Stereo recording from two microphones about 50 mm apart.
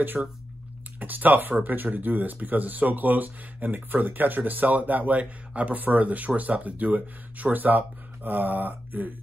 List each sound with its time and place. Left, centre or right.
0.2 s speech: centre
0.9 s speech: right